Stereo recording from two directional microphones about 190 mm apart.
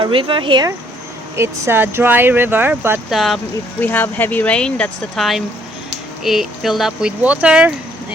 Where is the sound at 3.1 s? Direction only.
Centre (ahead or behind).